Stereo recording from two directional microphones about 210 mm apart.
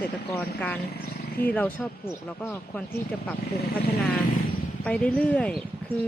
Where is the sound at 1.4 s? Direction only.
45° left (ahead or behind).